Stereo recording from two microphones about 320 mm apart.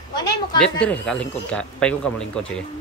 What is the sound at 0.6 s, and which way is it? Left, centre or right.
Speech, centre.